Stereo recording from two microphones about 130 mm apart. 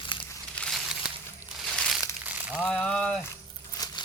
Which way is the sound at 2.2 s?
15° right (ahead or behind).